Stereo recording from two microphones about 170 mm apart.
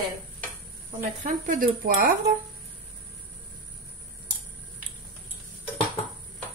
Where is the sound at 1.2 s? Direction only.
50° right (ahead or behind).